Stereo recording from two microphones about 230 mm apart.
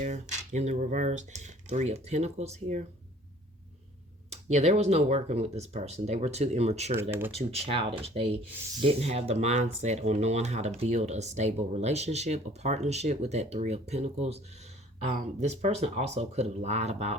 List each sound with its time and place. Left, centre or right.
0.0 s speech: right
4.3 s speech: right
6.9 s speech: centre
7.3 s speech: right